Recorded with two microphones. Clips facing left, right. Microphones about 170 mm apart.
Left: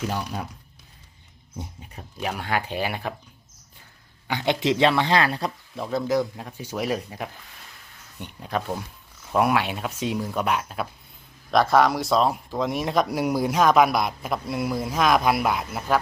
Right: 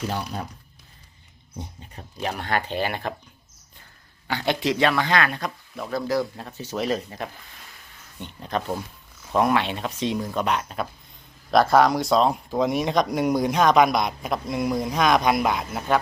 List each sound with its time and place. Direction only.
2.2 s speech: 10° left (ahead or behind)
4.3 s speech: 20° left (ahead or behind)
6.1 s speech: 15° left (ahead or behind)